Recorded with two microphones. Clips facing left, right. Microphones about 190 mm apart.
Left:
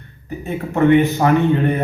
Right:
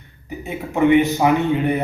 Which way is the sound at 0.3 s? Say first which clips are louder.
Left 3 dB; 15° right (ahead or behind).